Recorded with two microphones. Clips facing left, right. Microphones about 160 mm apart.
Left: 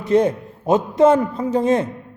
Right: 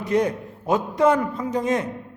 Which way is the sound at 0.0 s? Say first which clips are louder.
Left 5 dB; 25° left (ahead or behind).